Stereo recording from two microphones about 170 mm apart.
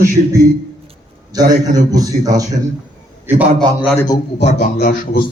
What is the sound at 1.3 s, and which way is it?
A man's voice, 25° right (ahead or behind).